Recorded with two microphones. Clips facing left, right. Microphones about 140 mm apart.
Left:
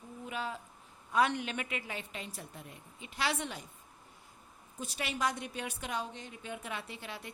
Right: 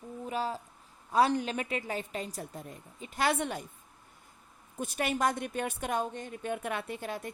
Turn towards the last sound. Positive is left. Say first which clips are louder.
# right 7 dB
turn(degrees=-45)  # may be behind; listen again after turning